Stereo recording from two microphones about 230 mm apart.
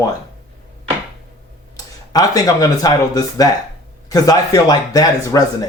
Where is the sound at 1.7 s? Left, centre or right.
Centre.